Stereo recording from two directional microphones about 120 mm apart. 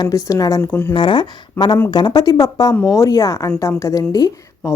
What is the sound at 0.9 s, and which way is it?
Speech, 40° left (ahead or behind).